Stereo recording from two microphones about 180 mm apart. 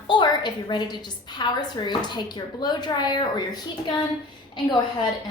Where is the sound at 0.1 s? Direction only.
25° left (ahead or behind).